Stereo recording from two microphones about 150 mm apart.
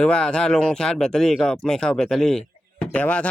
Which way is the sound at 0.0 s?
5° left (ahead or behind).